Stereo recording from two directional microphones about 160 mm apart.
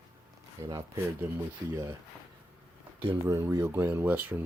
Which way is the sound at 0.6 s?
20° right (ahead or behind).